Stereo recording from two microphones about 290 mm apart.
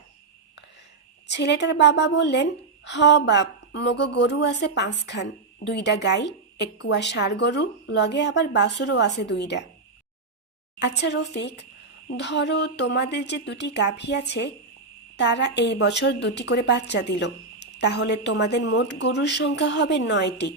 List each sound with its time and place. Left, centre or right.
1.3 s a woman's voice: left
10.8 s a woman's voice: left